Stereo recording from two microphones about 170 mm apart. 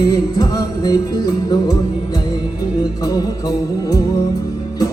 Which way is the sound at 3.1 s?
20° left (ahead or behind).